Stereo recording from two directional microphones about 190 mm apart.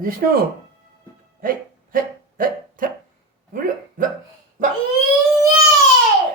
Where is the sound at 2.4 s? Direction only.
45° right (ahead or behind).